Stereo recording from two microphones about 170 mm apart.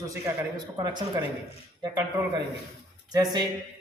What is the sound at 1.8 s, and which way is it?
A man's voice, 25° right (ahead or behind).